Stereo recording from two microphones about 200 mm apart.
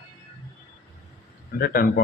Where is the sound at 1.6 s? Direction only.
50° left (ahead or behind).